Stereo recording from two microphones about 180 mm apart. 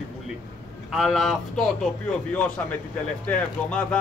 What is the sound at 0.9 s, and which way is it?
Speech, centre (ahead or behind).